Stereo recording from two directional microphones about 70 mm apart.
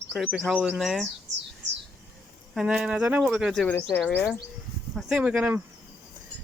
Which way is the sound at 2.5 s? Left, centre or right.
Centre.